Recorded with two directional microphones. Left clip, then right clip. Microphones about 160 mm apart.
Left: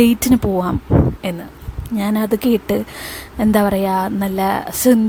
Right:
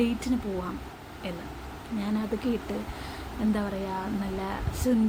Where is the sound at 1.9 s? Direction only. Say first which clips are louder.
Left 12 dB; 55° left (ahead or behind).